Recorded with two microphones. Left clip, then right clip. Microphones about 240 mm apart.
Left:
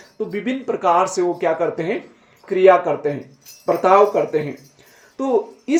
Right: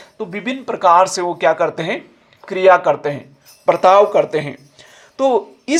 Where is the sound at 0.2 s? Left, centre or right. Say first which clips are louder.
Even; right.